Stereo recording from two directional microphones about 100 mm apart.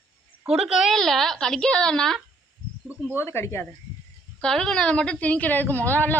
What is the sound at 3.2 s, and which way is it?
Speech, 25° left (ahead or behind).